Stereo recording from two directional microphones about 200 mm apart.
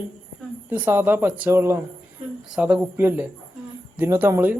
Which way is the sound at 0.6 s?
10° right (ahead or behind).